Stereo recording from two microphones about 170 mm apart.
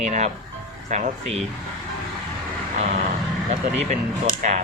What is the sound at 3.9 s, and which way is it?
Speech, 45° right (ahead or behind).